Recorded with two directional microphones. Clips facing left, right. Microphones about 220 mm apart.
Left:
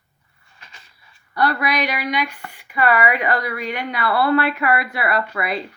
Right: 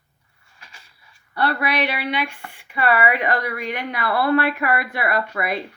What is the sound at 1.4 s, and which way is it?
Speech, 30° right (ahead or behind).